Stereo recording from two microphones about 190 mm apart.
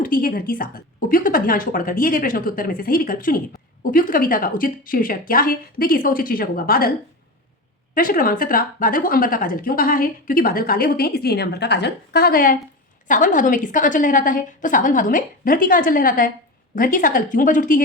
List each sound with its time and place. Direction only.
0.0 s speech: 45° left (ahead or behind)
7.9 s speech: 50° left (ahead or behind)